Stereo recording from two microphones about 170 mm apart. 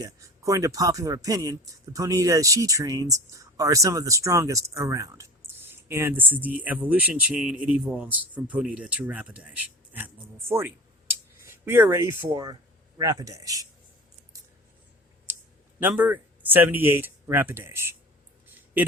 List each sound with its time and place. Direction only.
0.0 s speech: 20° right (ahead or behind)
11.4 s speech: 15° right (ahead or behind)
15.8 s speech: 10° right (ahead or behind)